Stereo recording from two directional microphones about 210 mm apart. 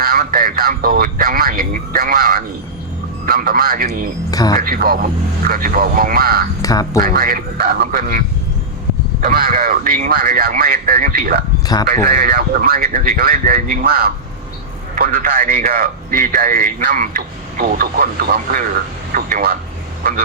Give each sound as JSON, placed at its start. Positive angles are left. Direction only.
{"t": 0.0, "sound": "a man's voice", "side_deg": -45}
{"t": 4.3, "sound": "speech", "side_deg": 15}
{"t": 4.6, "sound": "a man's voice", "side_deg": -45}
{"t": 6.6, "sound": "speech", "side_deg": 15}
{"t": 7.0, "sound": "a man's voice", "side_deg": -45}
{"t": 9.2, "sound": "a man's voice", "side_deg": -45}